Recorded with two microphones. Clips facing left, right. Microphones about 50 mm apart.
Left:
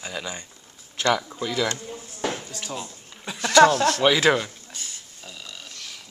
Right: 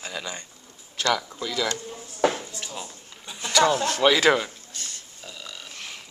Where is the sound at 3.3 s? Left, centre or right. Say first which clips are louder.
Left 6 dB; left.